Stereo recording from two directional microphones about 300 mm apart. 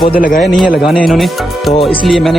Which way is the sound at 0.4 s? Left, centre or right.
Centre.